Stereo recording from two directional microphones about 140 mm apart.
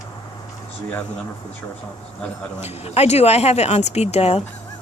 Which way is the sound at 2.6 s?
50° left (ahead or behind).